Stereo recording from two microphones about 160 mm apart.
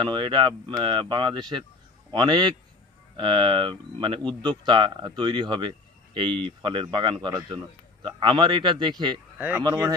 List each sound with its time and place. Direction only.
0.0 s speech: 30° right (ahead or behind)
9.4 s speech: 10° right (ahead or behind)